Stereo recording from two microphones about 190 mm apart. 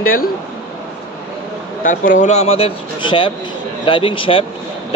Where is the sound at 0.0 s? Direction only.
50° left (ahead or behind).